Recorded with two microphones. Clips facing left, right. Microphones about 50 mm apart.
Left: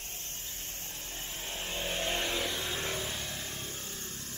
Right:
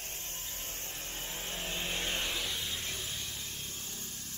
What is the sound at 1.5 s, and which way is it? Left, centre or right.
Vehicle, centre.